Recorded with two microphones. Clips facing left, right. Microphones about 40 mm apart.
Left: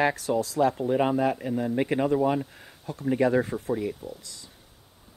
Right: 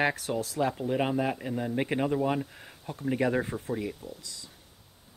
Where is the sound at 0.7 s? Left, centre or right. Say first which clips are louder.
Left 4 dB; centre.